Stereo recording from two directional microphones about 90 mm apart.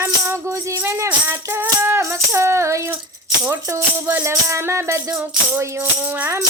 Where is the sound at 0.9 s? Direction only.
30° right (ahead or behind).